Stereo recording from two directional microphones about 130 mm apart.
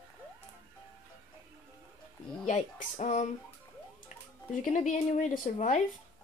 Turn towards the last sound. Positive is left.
turn(degrees=75)  # may be behind; listen again after turning